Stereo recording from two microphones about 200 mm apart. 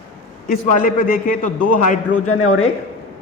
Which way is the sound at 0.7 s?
40° left (ahead or behind).